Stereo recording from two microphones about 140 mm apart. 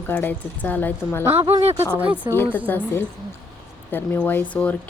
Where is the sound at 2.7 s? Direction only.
15° left (ahead or behind).